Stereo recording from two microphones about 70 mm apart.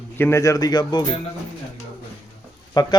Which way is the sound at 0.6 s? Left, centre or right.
Left.